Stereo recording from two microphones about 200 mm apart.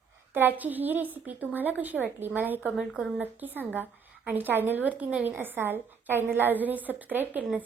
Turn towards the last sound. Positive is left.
turn(degrees=-10)  # may be behind; listen again after turning